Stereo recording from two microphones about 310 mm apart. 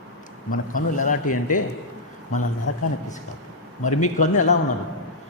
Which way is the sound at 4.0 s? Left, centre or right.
Left.